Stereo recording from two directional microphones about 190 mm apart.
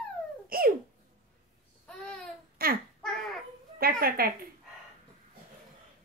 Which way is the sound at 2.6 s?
50° right (ahead or behind).